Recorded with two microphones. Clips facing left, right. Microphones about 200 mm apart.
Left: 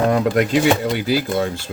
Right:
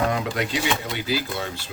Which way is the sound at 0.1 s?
50° left (ahead or behind).